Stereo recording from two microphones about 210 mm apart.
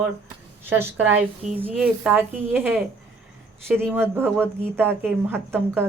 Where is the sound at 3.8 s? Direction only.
10° right (ahead or behind).